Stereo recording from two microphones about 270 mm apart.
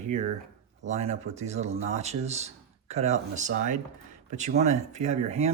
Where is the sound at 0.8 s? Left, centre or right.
Right.